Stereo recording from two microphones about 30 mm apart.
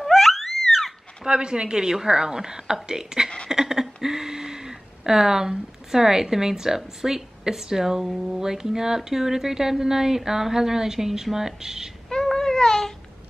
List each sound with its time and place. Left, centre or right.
0.0 s music: centre
1.2 s a woman's voice: right
8.1 s speech: centre
8.4 s speech: right
12.1 s babbling: centre